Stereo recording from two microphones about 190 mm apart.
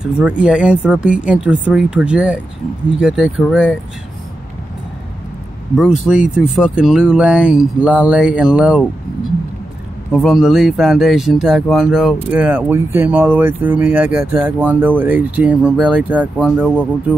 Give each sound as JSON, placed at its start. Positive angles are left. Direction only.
{"t": 0.0, "sound": "speech", "side_deg": -5}
{"t": 5.8, "sound": "speech", "side_deg": -5}
{"t": 10.1, "sound": "speech", "side_deg": 0}